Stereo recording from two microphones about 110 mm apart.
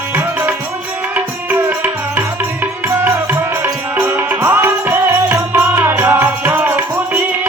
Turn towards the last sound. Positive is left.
turn(degrees=-15)  # may be behind; listen again after turning